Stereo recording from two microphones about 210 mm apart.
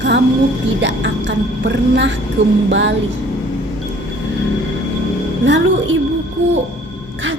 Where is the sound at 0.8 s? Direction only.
60° right (ahead or behind).